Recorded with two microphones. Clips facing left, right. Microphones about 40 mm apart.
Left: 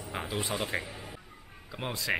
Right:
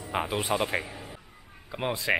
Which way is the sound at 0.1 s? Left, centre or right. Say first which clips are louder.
Right 6 dB; right.